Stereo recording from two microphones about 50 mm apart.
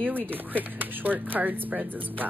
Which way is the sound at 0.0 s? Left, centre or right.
Right.